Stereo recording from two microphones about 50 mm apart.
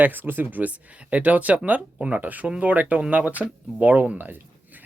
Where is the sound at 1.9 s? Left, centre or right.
Right.